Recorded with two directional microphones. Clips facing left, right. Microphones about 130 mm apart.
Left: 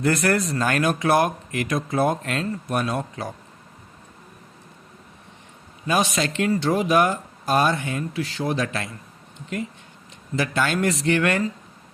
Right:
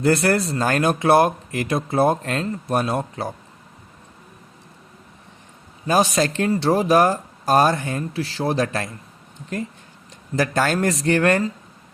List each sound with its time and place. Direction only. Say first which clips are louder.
0.0 s speech: right 3 dB; 30° right (ahead or behind)
5.9 s speech: right 4 dB; 35° right (ahead or behind)